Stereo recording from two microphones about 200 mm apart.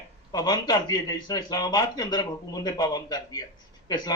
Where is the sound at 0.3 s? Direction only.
20° left (ahead or behind).